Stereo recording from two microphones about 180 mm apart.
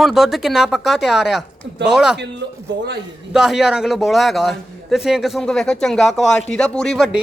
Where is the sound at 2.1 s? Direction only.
70° right (ahead or behind).